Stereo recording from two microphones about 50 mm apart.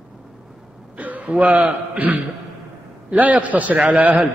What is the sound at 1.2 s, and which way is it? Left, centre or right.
A man's voice, right.